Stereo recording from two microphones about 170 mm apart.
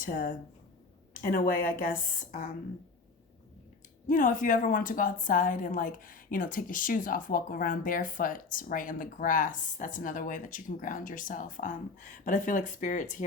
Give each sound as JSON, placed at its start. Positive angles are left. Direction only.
{"t": 0.0, "sound": "a woman's voice", "side_deg": 50}
{"t": 4.0, "sound": "a woman's voice", "side_deg": 50}